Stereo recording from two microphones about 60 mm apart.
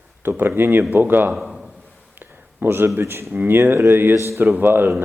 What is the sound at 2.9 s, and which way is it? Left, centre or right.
Speech, right.